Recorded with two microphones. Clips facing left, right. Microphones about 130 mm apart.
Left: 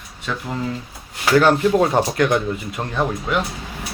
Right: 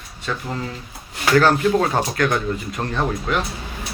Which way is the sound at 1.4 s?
20° left (ahead or behind).